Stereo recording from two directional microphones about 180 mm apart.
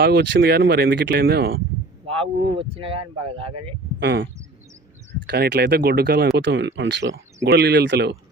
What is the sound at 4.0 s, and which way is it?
Speech, 75° right (ahead or behind).